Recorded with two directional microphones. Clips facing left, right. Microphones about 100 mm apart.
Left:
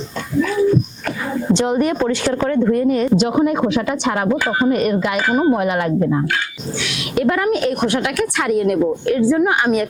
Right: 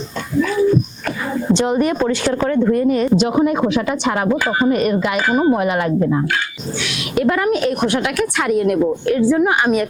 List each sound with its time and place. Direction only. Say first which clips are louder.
0.4 s dog: even; 20° right (ahead or behind)
1.5 s speech: even; 15° right (ahead or behind)